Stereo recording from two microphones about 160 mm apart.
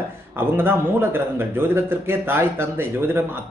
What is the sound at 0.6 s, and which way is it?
A man's voice, 15° right (ahead or behind).